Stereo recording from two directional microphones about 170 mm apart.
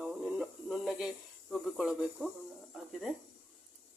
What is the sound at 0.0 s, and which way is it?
Snake, centre (ahead or behind).